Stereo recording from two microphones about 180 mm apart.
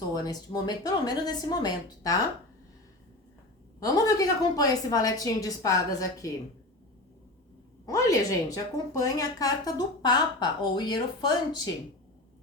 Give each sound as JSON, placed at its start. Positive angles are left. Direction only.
{"t": 0.1, "sound": "a woman's voice", "side_deg": 20}
{"t": 3.8, "sound": "a woman's voice", "side_deg": 20}
{"t": 7.9, "sound": "a woman's voice", "side_deg": 20}